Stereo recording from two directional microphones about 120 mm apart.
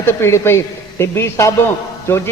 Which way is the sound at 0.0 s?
20° left (ahead or behind).